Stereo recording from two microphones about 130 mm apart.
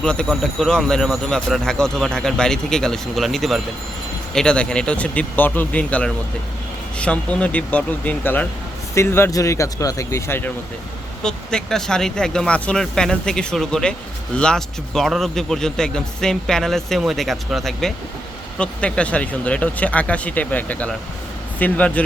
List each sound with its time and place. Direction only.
0.0 s speech: 5° left (ahead or behind)
11.2 s speech: 5° left (ahead or behind)